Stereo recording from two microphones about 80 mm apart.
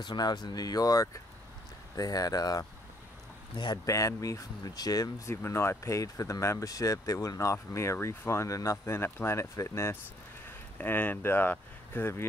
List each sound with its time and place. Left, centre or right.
0.0 s speech: left
3.5 s speech: left
3.8 s speech: left
5.3 s speech: left
10.8 s speech: left